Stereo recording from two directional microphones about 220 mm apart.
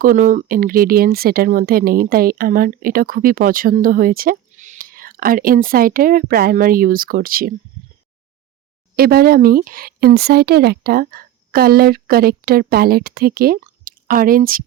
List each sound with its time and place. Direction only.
0.0 s speech: 40° right (ahead or behind)
9.0 s speech: 45° right (ahead or behind)